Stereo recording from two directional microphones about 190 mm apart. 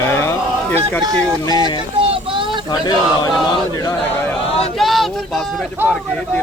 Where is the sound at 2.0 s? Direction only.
30° right (ahead or behind).